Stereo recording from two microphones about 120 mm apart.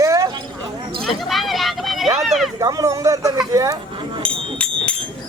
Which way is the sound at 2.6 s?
30° right (ahead or behind).